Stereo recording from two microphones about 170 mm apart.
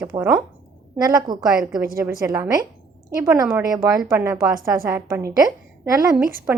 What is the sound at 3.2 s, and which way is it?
Speech, 20° right (ahead or behind).